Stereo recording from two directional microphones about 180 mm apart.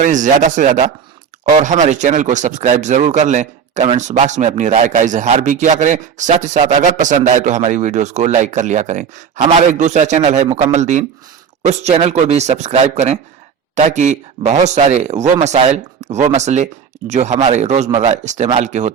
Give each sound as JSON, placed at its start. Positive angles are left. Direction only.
{"t": 0.0, "sound": "speech", "side_deg": -45}